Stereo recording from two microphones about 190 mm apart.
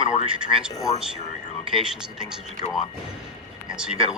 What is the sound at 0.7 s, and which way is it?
Speech, 15° left (ahead or behind).